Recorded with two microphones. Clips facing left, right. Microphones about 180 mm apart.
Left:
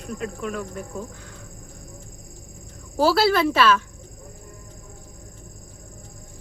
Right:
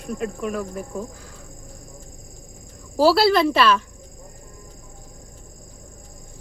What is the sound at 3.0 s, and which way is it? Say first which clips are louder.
Speech: right 3 dB; centre (ahead or behind).